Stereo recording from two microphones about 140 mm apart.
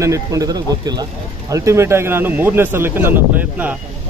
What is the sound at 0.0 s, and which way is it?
A man's voice, 25° right (ahead or behind).